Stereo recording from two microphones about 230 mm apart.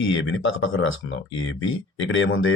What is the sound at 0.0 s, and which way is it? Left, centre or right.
Speech, left.